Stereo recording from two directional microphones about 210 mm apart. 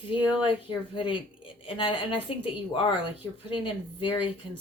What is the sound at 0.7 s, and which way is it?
Speech, 25° left (ahead or behind).